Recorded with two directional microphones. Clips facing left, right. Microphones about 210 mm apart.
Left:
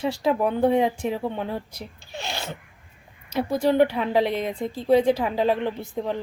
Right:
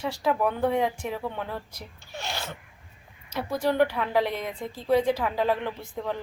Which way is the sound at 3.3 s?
25° left (ahead or behind).